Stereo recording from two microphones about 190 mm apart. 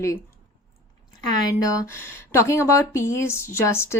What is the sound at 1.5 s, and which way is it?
Speech, 15° left (ahead or behind).